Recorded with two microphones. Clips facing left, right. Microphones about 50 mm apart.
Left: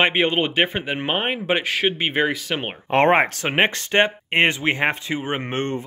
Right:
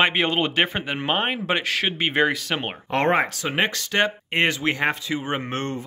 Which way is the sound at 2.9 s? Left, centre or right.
Left.